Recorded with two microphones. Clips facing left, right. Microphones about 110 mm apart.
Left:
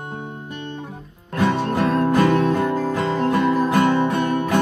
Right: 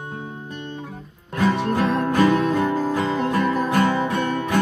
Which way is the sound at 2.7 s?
15° right (ahead or behind).